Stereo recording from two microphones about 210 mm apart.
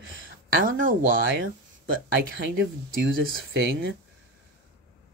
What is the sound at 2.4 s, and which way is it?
Speech, 45° right (ahead or behind).